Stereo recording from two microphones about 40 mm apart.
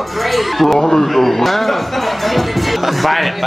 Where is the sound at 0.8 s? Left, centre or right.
Left.